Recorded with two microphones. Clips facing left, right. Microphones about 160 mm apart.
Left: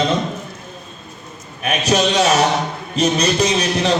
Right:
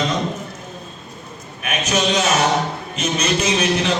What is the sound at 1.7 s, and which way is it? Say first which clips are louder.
A man's voice: left 3 dB; 35° left (ahead or behind).